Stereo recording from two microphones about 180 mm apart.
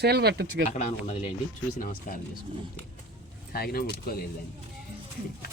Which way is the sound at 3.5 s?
55° left (ahead or behind).